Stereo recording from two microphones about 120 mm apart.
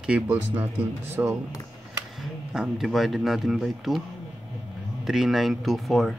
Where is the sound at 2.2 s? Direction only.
5° right (ahead or behind).